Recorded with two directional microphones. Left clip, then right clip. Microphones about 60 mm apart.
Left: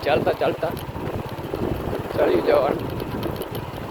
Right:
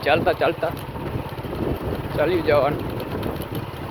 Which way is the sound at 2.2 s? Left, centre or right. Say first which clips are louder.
Left 1 dB; left.